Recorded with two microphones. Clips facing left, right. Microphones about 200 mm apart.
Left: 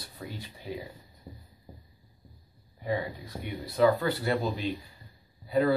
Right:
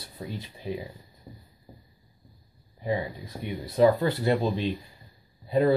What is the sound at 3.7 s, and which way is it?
Speech, 20° right (ahead or behind).